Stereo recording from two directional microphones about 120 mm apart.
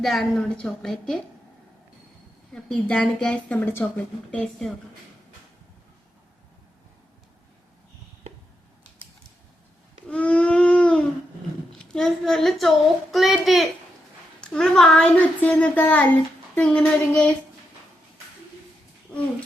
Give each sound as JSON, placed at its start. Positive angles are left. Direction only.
{"t": 0.0, "sound": "a child's voice", "side_deg": 0}
{"t": 2.6, "sound": "a woman's voice", "side_deg": 10}
{"t": 10.1, "sound": "baby cry", "side_deg": 10}
{"t": 11.9, "sound": "a child's voice", "side_deg": 5}